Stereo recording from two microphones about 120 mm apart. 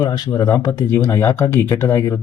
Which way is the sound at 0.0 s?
35° left (ahead or behind).